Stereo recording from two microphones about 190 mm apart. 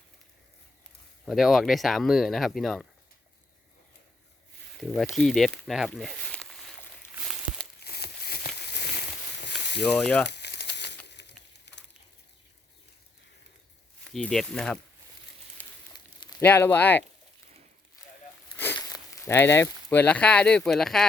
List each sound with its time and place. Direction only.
1.2 s speech: centre (ahead or behind)
4.8 s speech: centre (ahead or behind)
7.9 s a sound: 55° left (ahead or behind)
9.8 s speech: 5° left (ahead or behind)
10.2 s crumpling: 65° left (ahead or behind)
11.0 s a sound: 65° left (ahead or behind)
11.7 s frying: 65° left (ahead or behind)
14.0 s speech: 5° left (ahead or behind)
15.9 s a sound: 20° left (ahead or behind)
16.4 s speech: 10° left (ahead or behind)
18.5 s speech: 10° left (ahead or behind)